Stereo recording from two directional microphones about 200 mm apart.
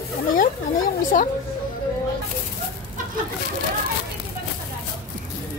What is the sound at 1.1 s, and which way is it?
Speech, 45° left (ahead or behind).